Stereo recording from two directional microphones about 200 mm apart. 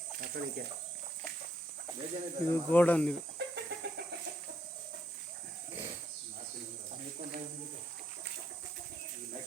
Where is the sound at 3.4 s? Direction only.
60° right (ahead or behind).